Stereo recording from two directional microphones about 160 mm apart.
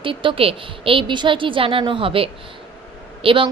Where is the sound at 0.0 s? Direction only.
30° right (ahead or behind).